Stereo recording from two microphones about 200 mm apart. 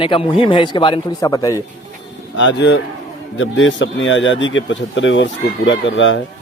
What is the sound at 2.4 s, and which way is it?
Speech, 65° left (ahead or behind).